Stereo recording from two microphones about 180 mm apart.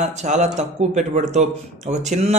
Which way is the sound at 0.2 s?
40° right (ahead or behind).